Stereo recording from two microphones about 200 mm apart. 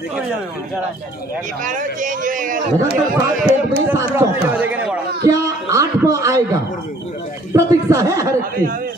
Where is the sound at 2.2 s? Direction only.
40° right (ahead or behind).